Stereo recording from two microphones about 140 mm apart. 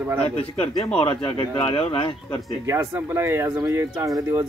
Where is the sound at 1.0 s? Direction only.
40° left (ahead or behind).